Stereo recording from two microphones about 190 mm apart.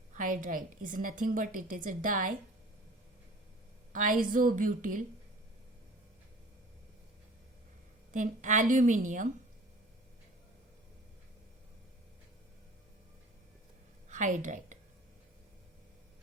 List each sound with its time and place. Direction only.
0.1 s a woman's voice: 45° right (ahead or behind)
3.9 s a woman's voice: 45° right (ahead or behind)
8.1 s a woman's voice: 40° right (ahead or behind)
14.1 s a woman's voice: 40° right (ahead or behind)